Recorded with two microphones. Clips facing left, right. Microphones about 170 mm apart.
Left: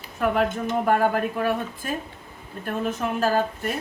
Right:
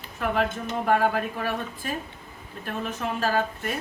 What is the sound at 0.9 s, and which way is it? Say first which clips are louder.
Speech: even; 50° left (ahead or behind).